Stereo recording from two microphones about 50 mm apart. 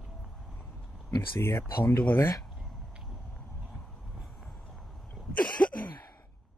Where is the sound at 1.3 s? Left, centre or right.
Left.